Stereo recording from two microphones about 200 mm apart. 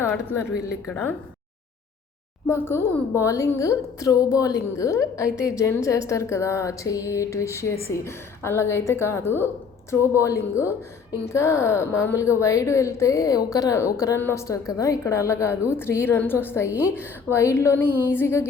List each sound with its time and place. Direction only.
2.5 s a woman's voice: 10° left (ahead or behind)